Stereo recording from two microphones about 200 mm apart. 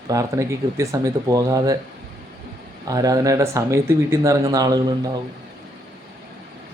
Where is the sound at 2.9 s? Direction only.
15° right (ahead or behind).